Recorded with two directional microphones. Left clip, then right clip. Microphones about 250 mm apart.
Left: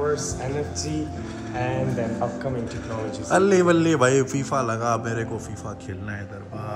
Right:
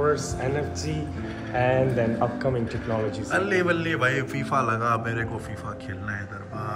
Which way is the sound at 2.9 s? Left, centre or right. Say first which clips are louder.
Left 3 dB; centre.